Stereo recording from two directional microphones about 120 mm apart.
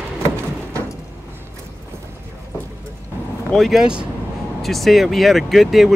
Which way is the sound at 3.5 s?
Centre (ahead or behind).